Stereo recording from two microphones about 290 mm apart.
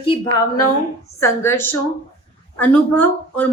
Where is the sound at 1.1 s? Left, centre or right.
Centre.